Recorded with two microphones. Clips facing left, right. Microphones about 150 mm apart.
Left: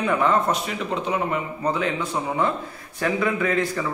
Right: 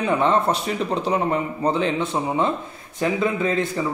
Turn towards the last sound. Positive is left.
turn(degrees=-25)  # may be behind; listen again after turning